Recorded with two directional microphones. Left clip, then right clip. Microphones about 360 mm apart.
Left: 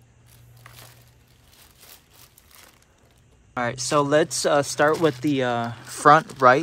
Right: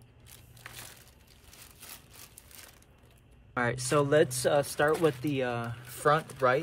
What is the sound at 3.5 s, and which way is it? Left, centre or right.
Speech, centre.